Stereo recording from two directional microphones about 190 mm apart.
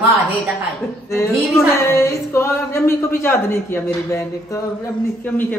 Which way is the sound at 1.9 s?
15° left (ahead or behind).